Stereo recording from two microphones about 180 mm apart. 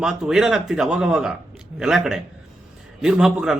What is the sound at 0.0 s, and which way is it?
A man's voice, 5° right (ahead or behind).